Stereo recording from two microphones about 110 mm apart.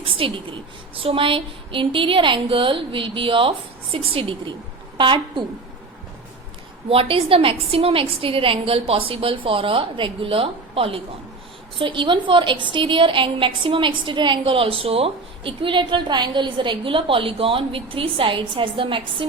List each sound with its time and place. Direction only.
0.2 s a woman's voice: 55° right (ahead or behind)
6.8 s a woman's voice: 60° right (ahead or behind)